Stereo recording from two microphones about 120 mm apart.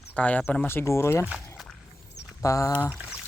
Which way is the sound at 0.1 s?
10° left (ahead or behind).